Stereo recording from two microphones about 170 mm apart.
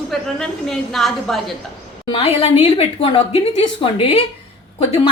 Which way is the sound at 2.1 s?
35° left (ahead or behind).